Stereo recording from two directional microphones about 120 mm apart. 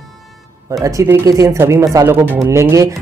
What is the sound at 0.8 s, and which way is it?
Speech, 30° right (ahead or behind).